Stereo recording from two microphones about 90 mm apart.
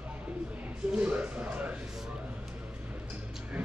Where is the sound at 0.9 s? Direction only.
15° right (ahead or behind).